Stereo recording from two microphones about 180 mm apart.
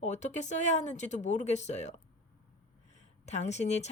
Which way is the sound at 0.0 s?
40° left (ahead or behind).